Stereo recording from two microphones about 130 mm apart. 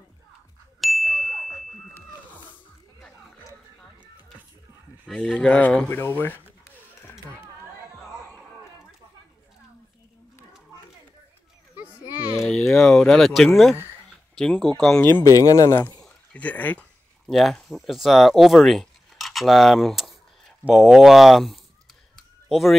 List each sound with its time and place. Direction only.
0.7 s ding: centre (ahead or behind)
5.0 s speech: 5° left (ahead or behind)
12.4 s a sound: 5° left (ahead or behind)
14.3 s speech: 5° left (ahead or behind)
15.0 s speech: 15° left (ahead or behind)
15.2 s speech: 25° left (ahead or behind)
16.0 s a sound: 10° left (ahead or behind)
17.3 s speech: centre (ahead or behind)
22.1 s a sound: centre (ahead or behind)